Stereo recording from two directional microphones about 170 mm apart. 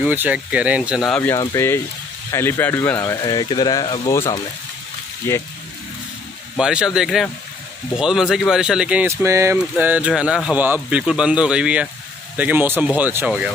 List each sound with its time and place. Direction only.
0.0 s speech: 10° right (ahead or behind)
1.1 s speech: 10° left (ahead or behind); by 4.1 s 30° left (ahead or behind)
4.1 s speech: 15° left (ahead or behind)
6.6 s speech: 5° right (ahead or behind)